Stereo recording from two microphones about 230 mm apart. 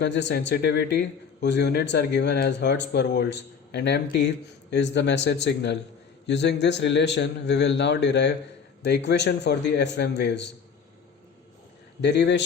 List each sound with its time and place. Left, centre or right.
0.0 s a man's voice: left
12.0 s a man's voice: left